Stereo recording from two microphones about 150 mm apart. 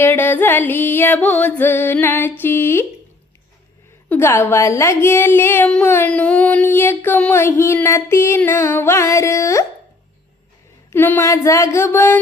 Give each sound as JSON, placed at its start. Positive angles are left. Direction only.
{"t": 0.0, "sound": "a woman's voice", "side_deg": 15}
{"t": 2.4, "sound": "a sound", "side_deg": 15}
{"t": 4.1, "sound": "a woman's voice", "side_deg": 15}
{"t": 10.9, "sound": "a woman's voice", "side_deg": 15}